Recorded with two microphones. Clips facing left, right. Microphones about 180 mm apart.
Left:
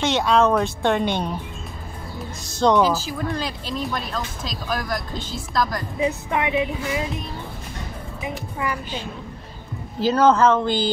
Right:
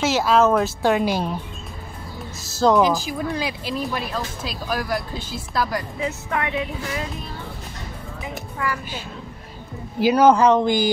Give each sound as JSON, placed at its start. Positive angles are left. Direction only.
{"t": 0.0, "sound": "speech", "side_deg": -5}
{"t": 2.4, "sound": "speech", "side_deg": -5}
{"t": 2.8, "sound": "speech", "side_deg": -15}
{"t": 5.9, "sound": "speech", "side_deg": 20}
{"t": 8.2, "sound": "music", "side_deg": 20}
{"t": 9.9, "sound": "speech", "side_deg": -10}